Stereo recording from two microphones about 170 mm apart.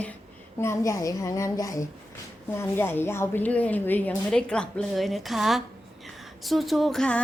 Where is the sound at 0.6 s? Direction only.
15° left (ahead or behind).